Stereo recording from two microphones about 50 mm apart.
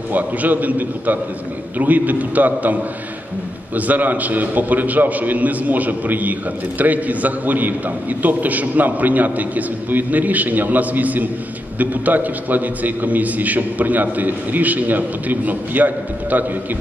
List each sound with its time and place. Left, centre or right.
0.1 s a man's voice: right